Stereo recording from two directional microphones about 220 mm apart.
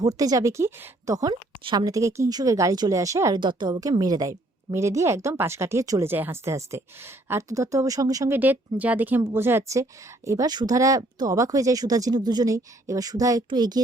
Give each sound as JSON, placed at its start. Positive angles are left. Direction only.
{"t": 0.0, "sound": "speech", "side_deg": -15}